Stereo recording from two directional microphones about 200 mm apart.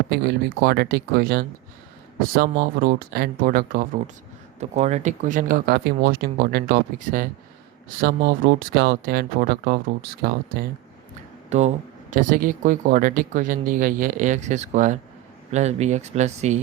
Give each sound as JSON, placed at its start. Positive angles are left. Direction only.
{"t": 0.1, "sound": "speech", "side_deg": -55}
{"t": 4.6, "sound": "speech", "side_deg": -35}
{"t": 11.4, "sound": "speech", "side_deg": -35}